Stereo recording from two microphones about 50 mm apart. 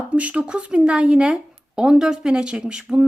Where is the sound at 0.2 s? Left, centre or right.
Right.